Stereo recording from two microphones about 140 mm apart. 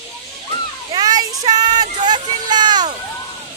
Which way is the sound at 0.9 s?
30° right (ahead or behind).